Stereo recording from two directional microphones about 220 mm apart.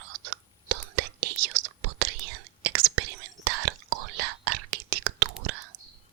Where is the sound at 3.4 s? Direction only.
50° right (ahead or behind).